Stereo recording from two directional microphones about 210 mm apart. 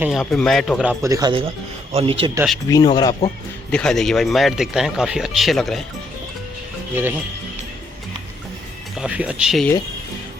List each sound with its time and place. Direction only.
0.0 s speech: centre (ahead or behind)
1.0 s speech: 15° right (ahead or behind)
2.6 s speech: 20° left (ahead or behind)
3.7 s speech: 5° left (ahead or behind)
9.0 s speech: 5° right (ahead or behind)